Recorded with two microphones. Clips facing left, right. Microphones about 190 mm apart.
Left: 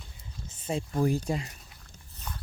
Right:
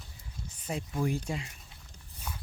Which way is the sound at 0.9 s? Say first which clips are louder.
Left 5 dB; 40° left (ahead or behind).